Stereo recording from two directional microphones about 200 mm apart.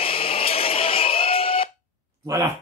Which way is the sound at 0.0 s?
30° left (ahead or behind).